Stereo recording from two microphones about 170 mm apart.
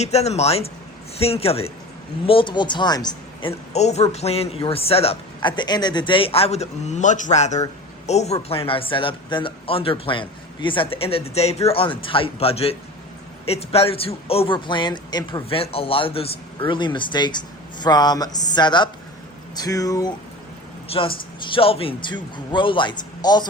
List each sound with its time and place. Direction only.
0.0 s speech: 40° left (ahead or behind)
3.7 s speech: 40° left (ahead or behind); by 20.1 s 20° left (ahead or behind)
20.8 s speech: 35° left (ahead or behind)